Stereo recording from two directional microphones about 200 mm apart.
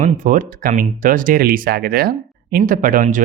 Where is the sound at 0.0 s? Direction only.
40° right (ahead or behind).